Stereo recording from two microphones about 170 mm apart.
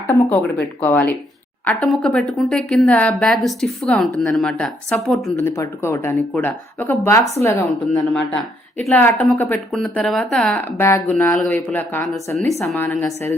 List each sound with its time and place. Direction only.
0.8 s speech: 10° left (ahead or behind)
5.4 s speech: 15° left (ahead or behind)